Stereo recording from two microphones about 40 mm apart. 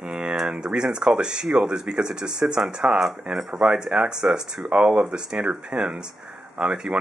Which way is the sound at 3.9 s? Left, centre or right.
Right.